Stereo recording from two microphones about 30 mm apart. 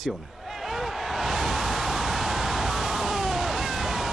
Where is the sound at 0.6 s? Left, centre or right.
Centre.